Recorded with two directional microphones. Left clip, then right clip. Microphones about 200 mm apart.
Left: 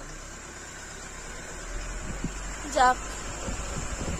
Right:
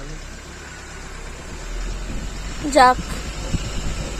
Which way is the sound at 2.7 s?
20° right (ahead or behind).